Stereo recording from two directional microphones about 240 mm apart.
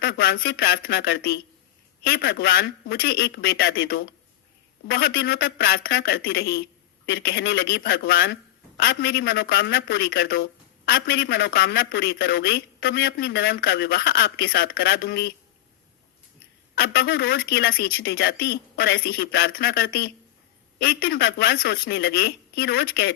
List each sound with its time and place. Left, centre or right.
0.0 s a man's voice: left
16.7 s a man's voice: left